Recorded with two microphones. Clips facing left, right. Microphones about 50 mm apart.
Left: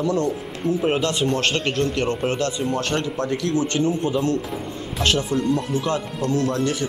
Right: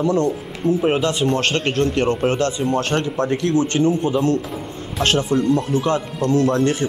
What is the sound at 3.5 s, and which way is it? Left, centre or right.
Speech, centre.